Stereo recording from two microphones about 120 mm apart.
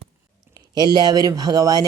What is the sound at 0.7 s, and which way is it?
Speech, 35° right (ahead or behind).